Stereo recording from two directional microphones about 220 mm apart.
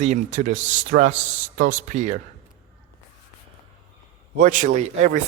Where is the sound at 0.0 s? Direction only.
30° right (ahead or behind).